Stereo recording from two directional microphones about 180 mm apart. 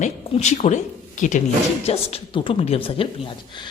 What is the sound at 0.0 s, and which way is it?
Speech, 40° left (ahead or behind).